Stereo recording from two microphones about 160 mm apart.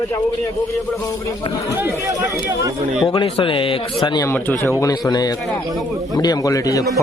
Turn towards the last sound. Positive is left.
turn(degrees=20)  # may be behind; listen again after turning